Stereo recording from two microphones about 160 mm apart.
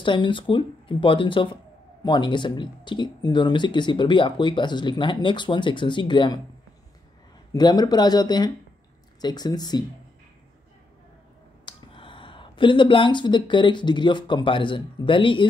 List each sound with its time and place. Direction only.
0.0 s speech: 30° left (ahead or behind)
7.5 s speech: 25° left (ahead or behind)
11.6 s speech: 30° left (ahead or behind)